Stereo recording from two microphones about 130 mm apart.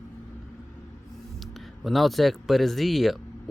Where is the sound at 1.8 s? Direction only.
Centre (ahead or behind).